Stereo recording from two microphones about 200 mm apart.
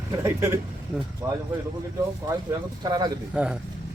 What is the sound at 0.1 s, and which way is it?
Speech, 15° right (ahead or behind).